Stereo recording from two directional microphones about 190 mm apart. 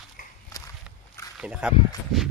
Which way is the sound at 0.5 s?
20° left (ahead or behind).